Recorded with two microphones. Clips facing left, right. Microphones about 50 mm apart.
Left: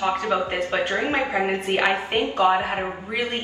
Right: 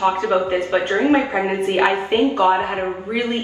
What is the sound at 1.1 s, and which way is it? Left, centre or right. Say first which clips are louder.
A woman's voice: right 5 dB; right.